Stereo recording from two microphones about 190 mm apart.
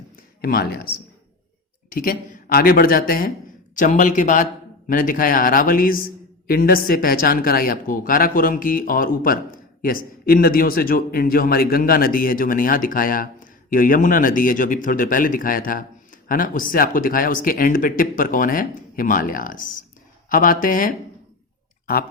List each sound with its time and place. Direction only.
0.4 s speech: 55° left (ahead or behind)
1.9 s speech: 45° left (ahead or behind)